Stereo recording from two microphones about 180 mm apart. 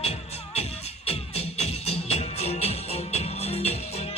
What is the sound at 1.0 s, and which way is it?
Music, 35° left (ahead or behind).